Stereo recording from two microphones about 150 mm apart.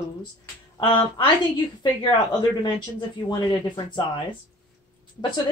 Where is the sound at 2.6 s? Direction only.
30° left (ahead or behind).